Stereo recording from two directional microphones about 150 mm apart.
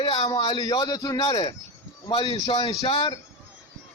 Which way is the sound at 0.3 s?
30° left (ahead or behind).